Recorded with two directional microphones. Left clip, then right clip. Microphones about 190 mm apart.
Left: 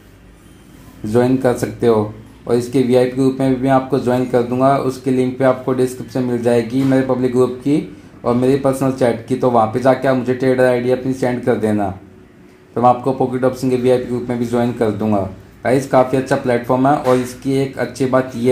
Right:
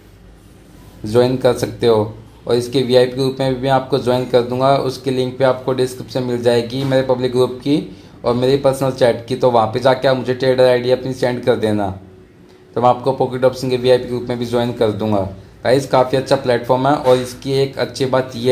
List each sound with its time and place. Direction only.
1.0 s speech: 5° left (ahead or behind)